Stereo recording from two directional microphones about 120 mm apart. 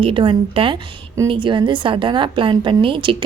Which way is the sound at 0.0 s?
45° right (ahead or behind).